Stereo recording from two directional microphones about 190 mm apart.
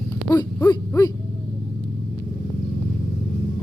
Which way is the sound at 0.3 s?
20° left (ahead or behind).